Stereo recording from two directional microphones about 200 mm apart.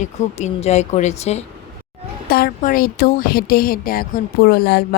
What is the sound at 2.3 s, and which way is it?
Speech, 45° left (ahead or behind).